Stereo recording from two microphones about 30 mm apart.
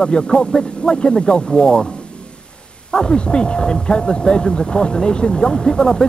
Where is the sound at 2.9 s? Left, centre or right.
Left.